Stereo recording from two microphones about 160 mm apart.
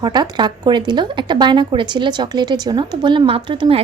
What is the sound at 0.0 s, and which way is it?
A woman's voice, 25° right (ahead or behind).